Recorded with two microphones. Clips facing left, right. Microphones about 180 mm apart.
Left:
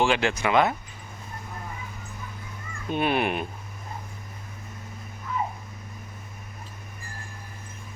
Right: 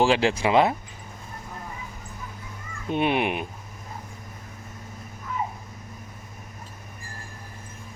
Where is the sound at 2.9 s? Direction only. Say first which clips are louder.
Right 1 dB; 20° right (ahead or behind).